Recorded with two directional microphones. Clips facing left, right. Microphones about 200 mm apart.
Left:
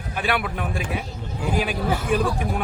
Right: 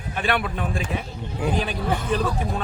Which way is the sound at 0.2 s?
5° left (ahead or behind).